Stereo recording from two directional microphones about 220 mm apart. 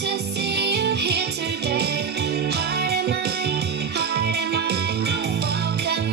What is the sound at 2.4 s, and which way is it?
Music, 45° right (ahead or behind).